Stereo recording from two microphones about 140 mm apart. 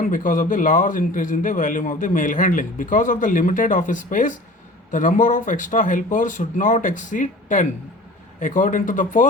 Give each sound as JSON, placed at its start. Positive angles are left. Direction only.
{"t": 0.0, "sound": "a man's voice", "side_deg": 70}